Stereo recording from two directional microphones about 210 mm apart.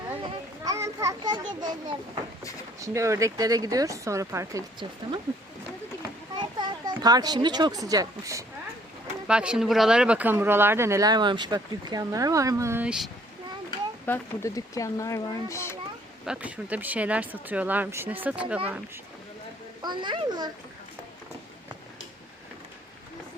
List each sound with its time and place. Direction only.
0.6 s children playing: 15° right (ahead or behind)
2.8 s speech: 15° right (ahead or behind)
6.4 s a child's voice: 20° right (ahead or behind)
9.2 s speech: 5° right (ahead or behind)
13.7 s speech: 15° left (ahead or behind)
16.2 s speech: 5° right (ahead or behind)
19.8 s a child's voice: 20° right (ahead or behind)